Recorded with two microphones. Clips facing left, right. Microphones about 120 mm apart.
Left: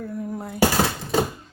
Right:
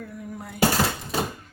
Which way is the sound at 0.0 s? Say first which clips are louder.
Left 6 dB; 35° left (ahead or behind).